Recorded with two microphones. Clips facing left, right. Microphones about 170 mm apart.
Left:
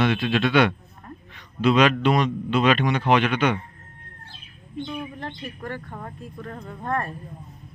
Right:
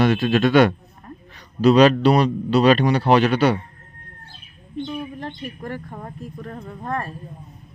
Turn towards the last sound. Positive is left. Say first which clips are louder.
# right 1 dB
turn(degrees=-10)  # may be behind; listen again after turning